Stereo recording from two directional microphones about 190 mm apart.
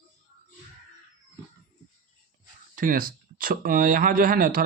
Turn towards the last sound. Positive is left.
turn(degrees=-50)  # may be behind; listen again after turning